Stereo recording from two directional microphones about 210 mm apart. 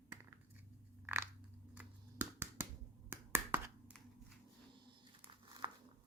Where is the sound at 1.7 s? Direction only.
10° right (ahead or behind).